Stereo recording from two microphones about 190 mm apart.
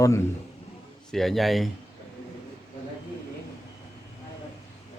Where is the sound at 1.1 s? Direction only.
Centre (ahead or behind).